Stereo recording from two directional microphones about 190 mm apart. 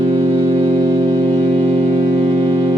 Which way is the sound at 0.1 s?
25° right (ahead or behind).